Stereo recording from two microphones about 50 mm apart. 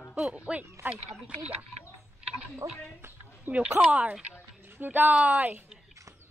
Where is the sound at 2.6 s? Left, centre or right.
Right.